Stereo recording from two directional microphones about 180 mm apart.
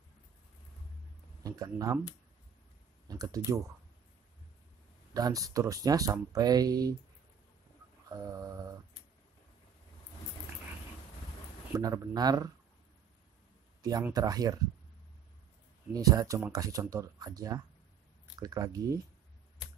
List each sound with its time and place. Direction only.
1.4 s speech: 20° right (ahead or behind)
3.1 s speech: 20° right (ahead or behind)
5.1 s speech: 20° right (ahead or behind)
8.1 s a sound: 20° right (ahead or behind)
11.7 s speech: 20° right (ahead or behind)
13.8 s speech: 20° right (ahead or behind)
15.9 s speech: 20° right (ahead or behind)